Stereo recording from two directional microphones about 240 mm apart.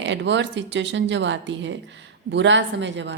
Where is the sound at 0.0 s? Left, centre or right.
Right.